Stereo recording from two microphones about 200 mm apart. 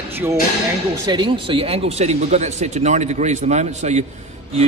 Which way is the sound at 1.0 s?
25° right (ahead or behind).